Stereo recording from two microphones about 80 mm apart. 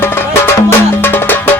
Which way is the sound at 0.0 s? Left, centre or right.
Left.